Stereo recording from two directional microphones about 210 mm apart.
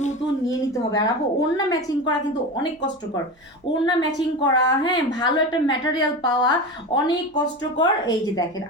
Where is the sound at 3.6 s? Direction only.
25° left (ahead or behind).